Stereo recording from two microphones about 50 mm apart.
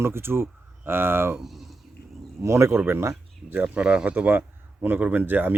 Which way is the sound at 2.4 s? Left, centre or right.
Right.